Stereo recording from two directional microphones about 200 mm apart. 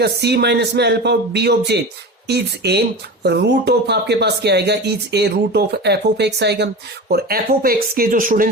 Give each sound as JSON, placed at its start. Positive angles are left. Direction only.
{"t": 0.0, "sound": "speech", "side_deg": -55}